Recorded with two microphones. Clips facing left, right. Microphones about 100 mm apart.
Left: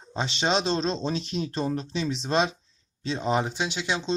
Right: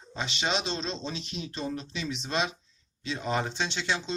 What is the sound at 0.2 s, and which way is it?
Speech, 35° left (ahead or behind).